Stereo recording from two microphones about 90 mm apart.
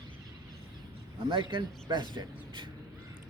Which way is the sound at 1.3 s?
65° right (ahead or behind).